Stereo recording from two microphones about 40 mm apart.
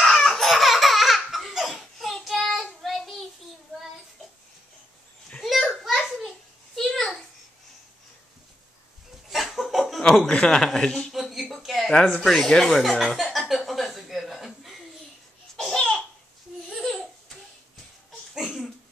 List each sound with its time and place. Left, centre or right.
0.0 s laughter: centre
1.5 s a sound: centre
2.6 s child singing: centre
5.4 s a sound: centre
6.8 s a sound: centre
9.3 s chuckle: centre
10.3 s speech: centre
11.1 s a sound: centre
11.9 s speech: centre
13.0 s chuckle: centre
15.5 s babbling: centre
16.8 s laughter: centre
18.3 s laughter: centre